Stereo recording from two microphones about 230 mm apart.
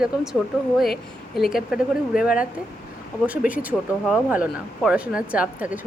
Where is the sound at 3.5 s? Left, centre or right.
Centre.